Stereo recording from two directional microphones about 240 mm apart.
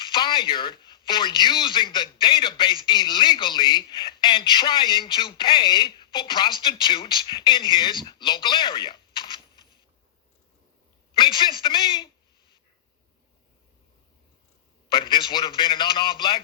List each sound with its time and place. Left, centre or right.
0.0 s speech: centre
11.2 s speech: centre
14.8 s speech: centre